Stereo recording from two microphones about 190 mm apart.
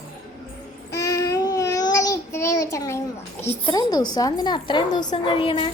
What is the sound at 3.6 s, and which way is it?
A woman's voice, 20° left (ahead or behind).